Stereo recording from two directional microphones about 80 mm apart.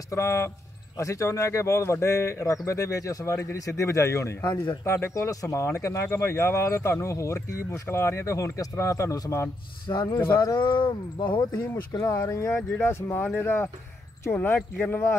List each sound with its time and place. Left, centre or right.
0.1 s speech: left
4.4 s speech: left
4.8 s speech: left
10.0 s speech: left
11.9 s speech: left
12.8 s speech: left